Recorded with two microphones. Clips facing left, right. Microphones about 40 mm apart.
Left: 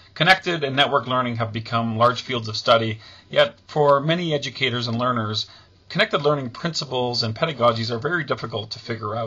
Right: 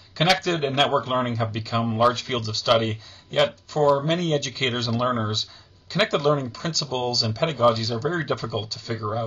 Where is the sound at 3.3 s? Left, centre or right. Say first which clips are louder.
Left 3 dB; centre.